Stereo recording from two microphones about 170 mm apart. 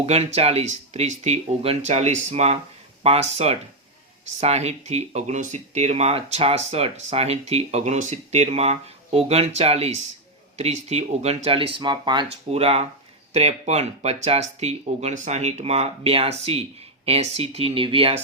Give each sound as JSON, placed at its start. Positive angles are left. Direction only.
{"t": 0.0, "sound": "speech", "side_deg": -35}